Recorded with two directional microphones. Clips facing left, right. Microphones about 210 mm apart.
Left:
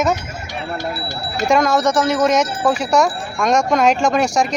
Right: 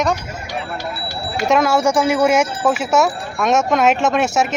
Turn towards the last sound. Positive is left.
turn(degrees=-5)  # may be behind; listen again after turning